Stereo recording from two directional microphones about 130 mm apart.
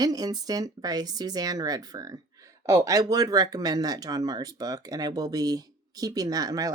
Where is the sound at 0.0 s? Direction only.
30° right (ahead or behind).